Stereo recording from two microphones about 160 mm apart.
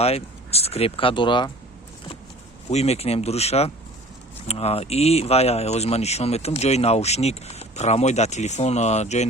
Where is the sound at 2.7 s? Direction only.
40° left (ahead or behind).